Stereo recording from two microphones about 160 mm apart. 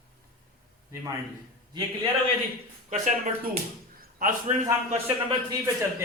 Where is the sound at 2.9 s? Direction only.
50° right (ahead or behind).